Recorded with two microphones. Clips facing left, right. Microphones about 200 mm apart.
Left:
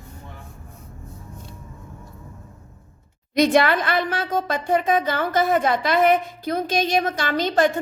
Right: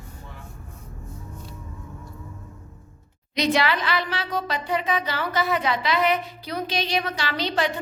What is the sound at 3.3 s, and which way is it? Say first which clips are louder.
A woman's voice: left 5 dB; 50° left (ahead or behind).